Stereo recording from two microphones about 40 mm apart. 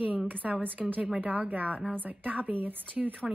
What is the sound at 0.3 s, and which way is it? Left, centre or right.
Speech, right.